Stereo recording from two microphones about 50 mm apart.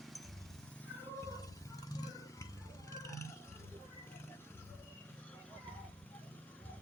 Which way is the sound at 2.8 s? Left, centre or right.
Left.